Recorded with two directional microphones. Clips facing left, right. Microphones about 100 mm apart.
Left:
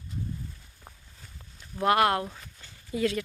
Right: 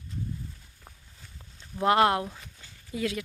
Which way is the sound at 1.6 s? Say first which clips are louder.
Right 1 dB; 20° right (ahead or behind).